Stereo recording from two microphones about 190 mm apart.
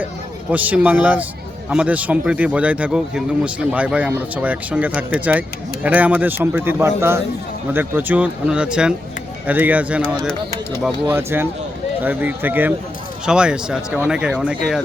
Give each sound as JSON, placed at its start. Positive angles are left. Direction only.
{"t": 0.5, "sound": "speech", "side_deg": -10}